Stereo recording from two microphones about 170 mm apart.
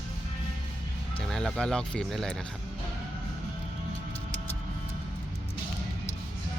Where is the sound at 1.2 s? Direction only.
5° left (ahead or behind).